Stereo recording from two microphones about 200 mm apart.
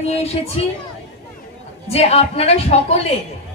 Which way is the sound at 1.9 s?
30° left (ahead or behind).